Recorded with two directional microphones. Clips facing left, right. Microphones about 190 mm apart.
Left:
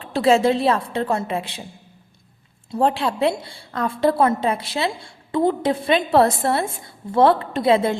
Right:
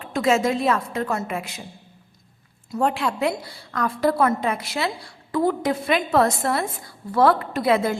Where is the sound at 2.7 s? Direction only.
30° left (ahead or behind).